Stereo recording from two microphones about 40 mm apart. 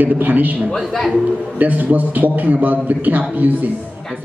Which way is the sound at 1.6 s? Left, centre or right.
Right.